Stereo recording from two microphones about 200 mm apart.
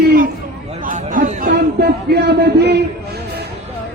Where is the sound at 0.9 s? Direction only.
40° right (ahead or behind); by 2.8 s 55° right (ahead or behind).